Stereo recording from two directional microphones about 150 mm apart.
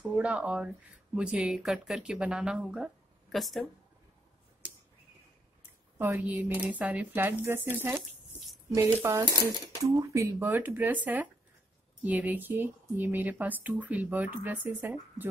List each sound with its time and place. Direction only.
0.1 s speech: 10° right (ahead or behind)
5.6 s speech: 15° right (ahead or behind)